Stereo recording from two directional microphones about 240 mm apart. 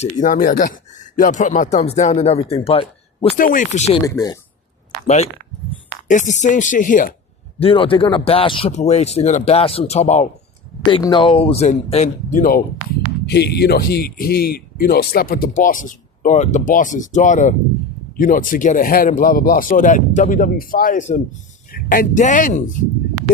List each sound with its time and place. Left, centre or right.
0.0 s speech: left
3.3 s speech: left
4.0 s speech: centre
6.1 s speech: left
7.6 s speech: left
13.2 s speech: left